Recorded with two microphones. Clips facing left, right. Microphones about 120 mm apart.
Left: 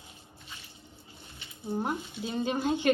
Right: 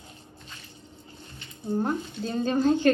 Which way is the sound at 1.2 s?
5° left (ahead or behind).